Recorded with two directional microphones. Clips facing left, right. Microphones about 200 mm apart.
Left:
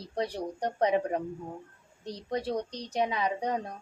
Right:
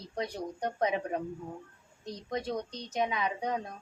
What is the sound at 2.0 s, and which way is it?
Child singing, 35° left (ahead or behind).